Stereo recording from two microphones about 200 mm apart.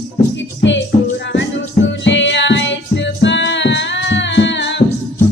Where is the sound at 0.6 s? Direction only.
60° left (ahead or behind).